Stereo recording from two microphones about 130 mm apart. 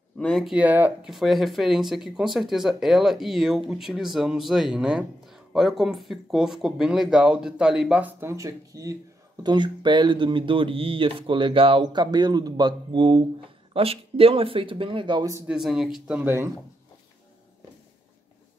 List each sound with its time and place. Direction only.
0.2 s speech: 5° left (ahead or behind)
0.6 s speech: 10° right (ahead or behind)
1.1 s speech: centre (ahead or behind)
8.2 s speech: 20° right (ahead or behind)
9.4 s speech: 35° right (ahead or behind)
15.4 s speech: 5° right (ahead or behind)